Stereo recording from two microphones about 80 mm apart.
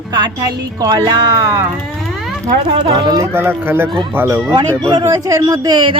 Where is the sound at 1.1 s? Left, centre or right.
Right.